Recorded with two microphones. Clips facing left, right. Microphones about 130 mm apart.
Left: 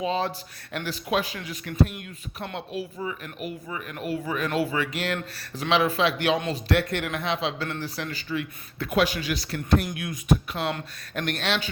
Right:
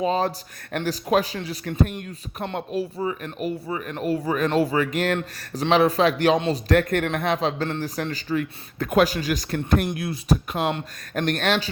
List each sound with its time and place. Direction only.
0.0 s a man's voice: 40° right (ahead or behind)
10.0 s a man's voice: 35° right (ahead or behind)